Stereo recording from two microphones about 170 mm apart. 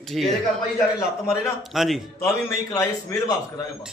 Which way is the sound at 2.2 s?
15° left (ahead or behind).